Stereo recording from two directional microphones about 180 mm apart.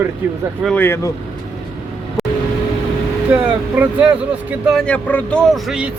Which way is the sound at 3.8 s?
10° right (ahead or behind).